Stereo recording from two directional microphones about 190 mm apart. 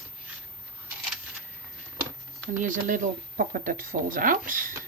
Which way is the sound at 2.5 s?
40° right (ahead or behind).